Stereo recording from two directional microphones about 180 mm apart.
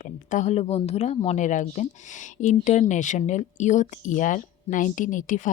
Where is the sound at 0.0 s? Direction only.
45° left (ahead or behind).